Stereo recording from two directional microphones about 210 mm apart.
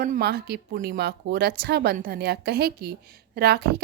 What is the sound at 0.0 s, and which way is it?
Speech, 45° right (ahead or behind).